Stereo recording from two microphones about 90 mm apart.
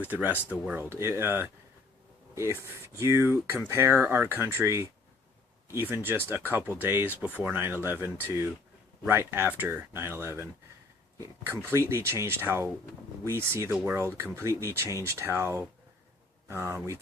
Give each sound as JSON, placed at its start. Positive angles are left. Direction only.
{"t": 0.0, "sound": "speech", "side_deg": -20}
{"t": 0.8, "sound": "speech", "side_deg": -30}